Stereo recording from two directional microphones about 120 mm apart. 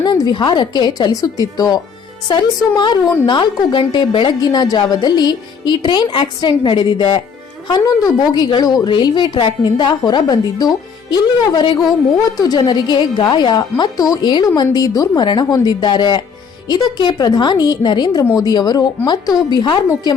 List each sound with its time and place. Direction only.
0.0 s a woman's voice: 35° left (ahead or behind)
7.7 s a woman's voice: 35° left (ahead or behind)